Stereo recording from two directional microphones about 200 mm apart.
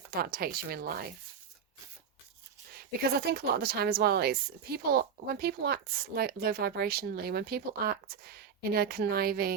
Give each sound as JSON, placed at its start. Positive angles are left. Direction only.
{"t": 0.1, "sound": "speech", "side_deg": -50}
{"t": 3.1, "sound": "speech", "side_deg": -50}